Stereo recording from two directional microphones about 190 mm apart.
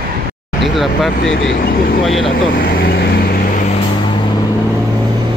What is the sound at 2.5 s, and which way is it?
Vehicle, 50° left (ahead or behind).